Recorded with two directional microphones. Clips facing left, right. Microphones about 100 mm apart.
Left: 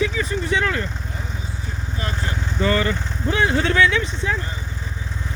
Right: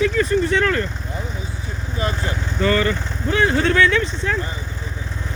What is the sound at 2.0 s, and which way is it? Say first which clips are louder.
Speech: right 5 dB; 20° right (ahead or behind).